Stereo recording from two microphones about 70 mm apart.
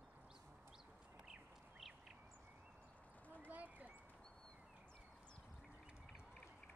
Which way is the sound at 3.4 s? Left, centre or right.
Right.